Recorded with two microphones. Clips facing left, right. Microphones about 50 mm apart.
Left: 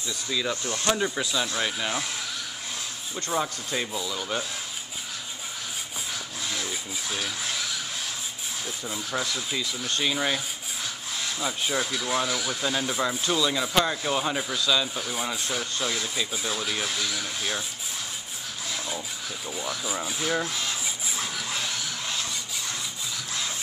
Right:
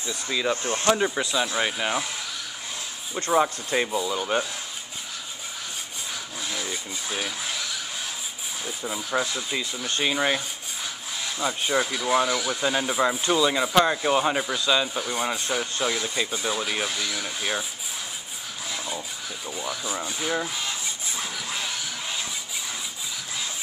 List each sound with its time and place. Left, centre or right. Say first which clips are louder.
0.0 s speech: right 2 dB; right
0.9 s speech: right 3 dB; centre
3.2 s speech: right 6 dB; centre
6.4 s wood: right 1 dB; centre
7.2 s a sound: right 1 dB; centre
8.6 s speech: right 4 dB; centre
11.1 s speech: right 2 dB; centre
18.7 s speech: right 1 dB; centre
20.8 s printer: even; centre